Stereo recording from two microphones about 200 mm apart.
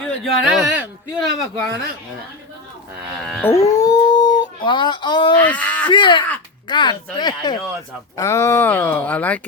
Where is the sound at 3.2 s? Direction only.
5° left (ahead or behind); by 5.4 s 20° left (ahead or behind).